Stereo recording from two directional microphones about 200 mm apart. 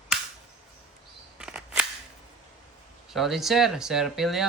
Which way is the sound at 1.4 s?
5° right (ahead or behind).